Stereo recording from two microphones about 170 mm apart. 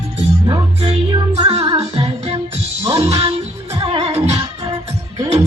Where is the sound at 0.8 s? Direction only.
35° right (ahead or behind).